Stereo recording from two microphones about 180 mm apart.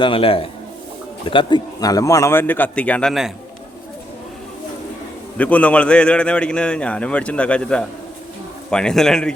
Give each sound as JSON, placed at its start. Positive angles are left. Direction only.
{"t": 0.0, "sound": "a man's voice", "side_deg": 30}
{"t": 5.4, "sound": "a man's voice", "side_deg": 10}